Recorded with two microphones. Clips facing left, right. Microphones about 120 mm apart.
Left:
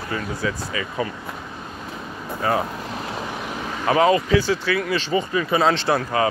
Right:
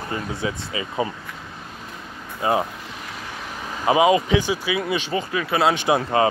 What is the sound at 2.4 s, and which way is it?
Speech, 20° right (ahead or behind).